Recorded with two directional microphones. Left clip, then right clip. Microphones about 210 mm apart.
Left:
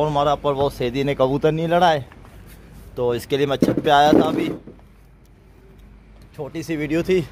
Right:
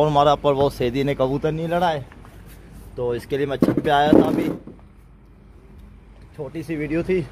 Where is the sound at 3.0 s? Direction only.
25° left (ahead or behind).